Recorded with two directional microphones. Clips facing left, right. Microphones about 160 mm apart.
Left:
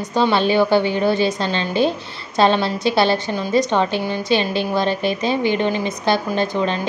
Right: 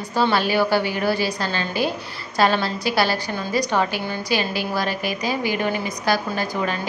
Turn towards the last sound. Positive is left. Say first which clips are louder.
# left 5 dB
turn(degrees=25)  # may be behind; listen again after turning